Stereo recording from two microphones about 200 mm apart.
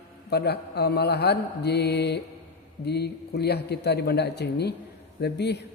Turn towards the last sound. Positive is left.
turn(degrees=55)  # may be behind; listen again after turning